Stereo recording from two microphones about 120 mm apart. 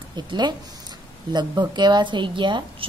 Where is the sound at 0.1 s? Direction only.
35° right (ahead or behind).